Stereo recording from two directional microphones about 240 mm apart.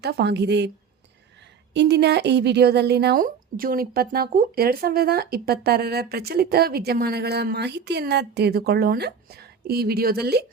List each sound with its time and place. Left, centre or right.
0.0 s a woman's voice: right
1.7 s a woman's voice: right